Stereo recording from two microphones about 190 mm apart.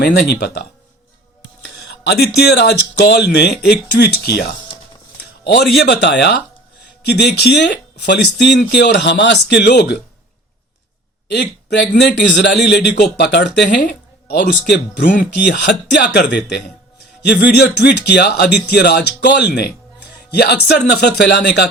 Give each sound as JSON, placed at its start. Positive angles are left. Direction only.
{"t": 0.0, "sound": "speech", "side_deg": 60}
{"t": 1.8, "sound": "speech", "side_deg": 60}
{"t": 5.7, "sound": "speech", "side_deg": 60}
{"t": 11.3, "sound": "a man's voice", "side_deg": 65}